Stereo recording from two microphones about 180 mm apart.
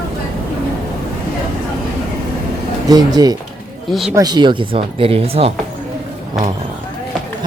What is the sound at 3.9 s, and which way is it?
Speech, centre (ahead or behind).